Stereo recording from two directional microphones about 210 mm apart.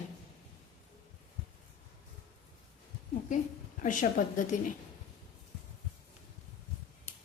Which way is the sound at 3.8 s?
40° left (ahead or behind).